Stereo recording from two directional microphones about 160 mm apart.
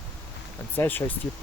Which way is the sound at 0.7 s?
10° left (ahead or behind).